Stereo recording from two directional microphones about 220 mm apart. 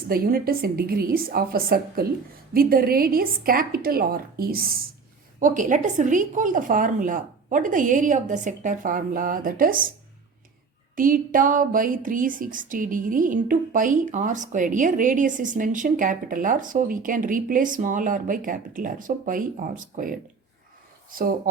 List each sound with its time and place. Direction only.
0.1 s a woman's voice: 40° right (ahead or behind)
10.9 s speech: 40° right (ahead or behind)